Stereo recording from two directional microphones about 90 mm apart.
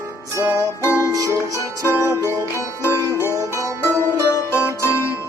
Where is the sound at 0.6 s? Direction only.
30° left (ahead or behind).